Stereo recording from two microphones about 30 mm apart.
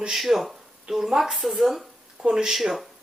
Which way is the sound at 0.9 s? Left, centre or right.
Centre.